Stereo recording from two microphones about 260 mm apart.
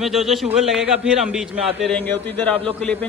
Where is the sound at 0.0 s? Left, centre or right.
Centre.